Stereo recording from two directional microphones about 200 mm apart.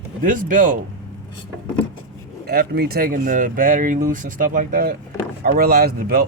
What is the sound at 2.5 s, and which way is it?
A man's voice, 50° right (ahead or behind).